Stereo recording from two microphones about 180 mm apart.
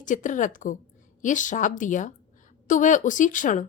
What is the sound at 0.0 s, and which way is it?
A woman's voice, 45° left (ahead or behind).